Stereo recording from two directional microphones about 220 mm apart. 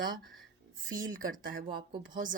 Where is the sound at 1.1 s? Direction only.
40° right (ahead or behind).